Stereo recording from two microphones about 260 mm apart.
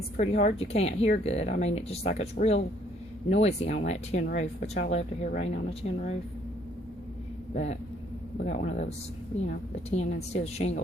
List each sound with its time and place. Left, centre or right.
0.2 s speech: left
7.5 s speech: left